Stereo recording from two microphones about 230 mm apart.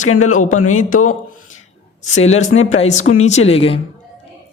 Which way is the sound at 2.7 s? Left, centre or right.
Left.